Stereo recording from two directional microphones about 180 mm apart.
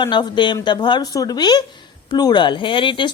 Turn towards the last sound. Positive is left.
turn(degrees=25)  # may be behind; listen again after turning